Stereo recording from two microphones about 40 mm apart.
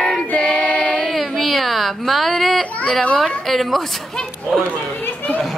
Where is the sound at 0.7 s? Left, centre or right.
Centre.